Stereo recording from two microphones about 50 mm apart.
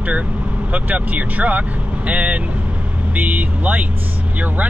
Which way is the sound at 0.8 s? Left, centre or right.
Right.